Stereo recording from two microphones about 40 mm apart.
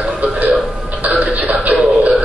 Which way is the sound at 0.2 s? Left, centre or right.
Right.